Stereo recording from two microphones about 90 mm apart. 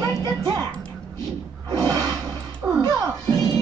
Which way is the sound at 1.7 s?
50° right (ahead or behind).